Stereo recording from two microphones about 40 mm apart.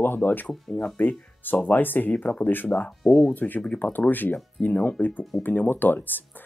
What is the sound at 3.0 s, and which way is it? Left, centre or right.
Speech, centre.